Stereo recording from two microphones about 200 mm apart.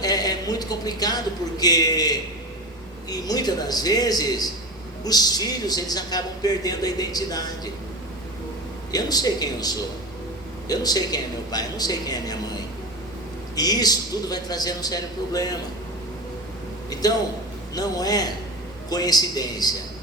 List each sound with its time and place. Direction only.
0.0 s a man's voice: 20° left (ahead or behind)
8.9 s speech: 20° left (ahead or behind)
13.6 s speech: 20° left (ahead or behind)
16.9 s speech: 20° left (ahead or behind)